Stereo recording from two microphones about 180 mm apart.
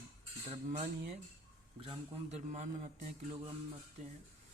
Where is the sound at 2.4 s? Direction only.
45° right (ahead or behind).